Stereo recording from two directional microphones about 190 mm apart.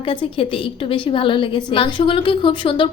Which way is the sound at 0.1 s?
25° left (ahead or behind).